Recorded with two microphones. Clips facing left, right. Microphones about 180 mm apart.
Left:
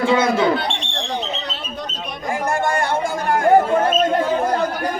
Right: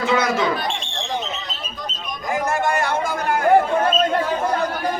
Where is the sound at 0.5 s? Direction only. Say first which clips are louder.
Left 3 dB; 70° left (ahead or behind).